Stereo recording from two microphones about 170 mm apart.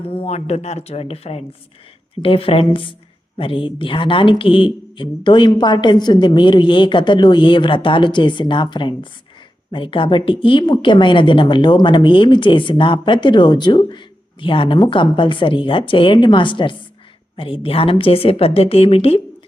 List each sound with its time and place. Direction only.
0.0 s speech: 35° left (ahead or behind)